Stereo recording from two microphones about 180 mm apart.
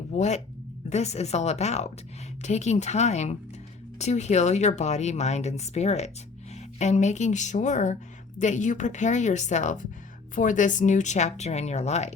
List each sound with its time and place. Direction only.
0.1 s speech: 40° left (ahead or behind)